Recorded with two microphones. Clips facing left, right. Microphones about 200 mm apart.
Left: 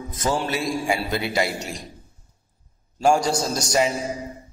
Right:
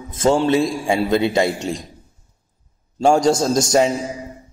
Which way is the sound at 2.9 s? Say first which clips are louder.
Right 5 dB; 25° right (ahead or behind).